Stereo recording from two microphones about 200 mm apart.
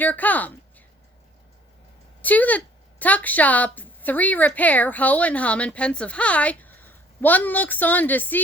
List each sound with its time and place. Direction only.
0.0 s a woman's voice: 10° left (ahead or behind)
2.2 s a woman's voice: 10° left (ahead or behind)